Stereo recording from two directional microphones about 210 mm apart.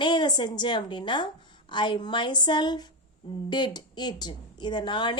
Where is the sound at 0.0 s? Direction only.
20° left (ahead or behind).